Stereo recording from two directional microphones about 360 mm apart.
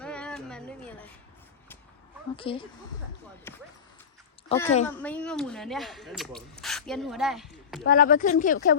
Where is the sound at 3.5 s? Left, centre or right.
Centre.